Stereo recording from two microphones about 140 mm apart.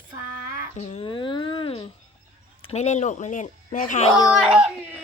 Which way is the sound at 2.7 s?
55° left (ahead or behind).